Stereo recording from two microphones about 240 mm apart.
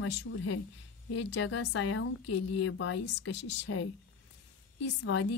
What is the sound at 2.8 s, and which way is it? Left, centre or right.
Speech, left.